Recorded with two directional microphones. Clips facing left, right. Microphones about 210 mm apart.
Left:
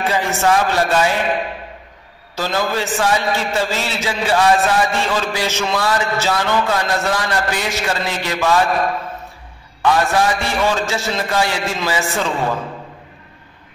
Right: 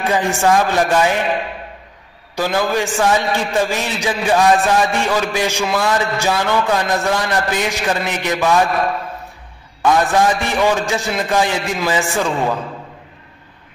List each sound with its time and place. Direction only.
0.1 s a man's voice: 15° right (ahead or behind)
2.3 s a man's voice: 15° right (ahead or behind)
9.8 s a man's voice: 15° right (ahead or behind)
12.0 s a man's voice: centre (ahead or behind)